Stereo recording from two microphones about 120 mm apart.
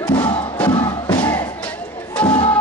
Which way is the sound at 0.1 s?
40° left (ahead or behind).